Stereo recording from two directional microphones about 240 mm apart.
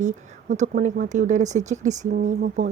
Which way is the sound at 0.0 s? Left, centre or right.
Right.